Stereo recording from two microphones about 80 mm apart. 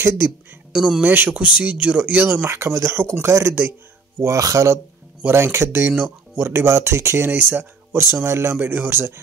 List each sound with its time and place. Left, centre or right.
0.7 s speech: centre
1.0 s speech: right
2.5 s speech: right
4.2 s speech: right